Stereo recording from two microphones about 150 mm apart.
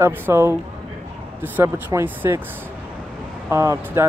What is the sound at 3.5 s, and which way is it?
Speech, 20° right (ahead or behind).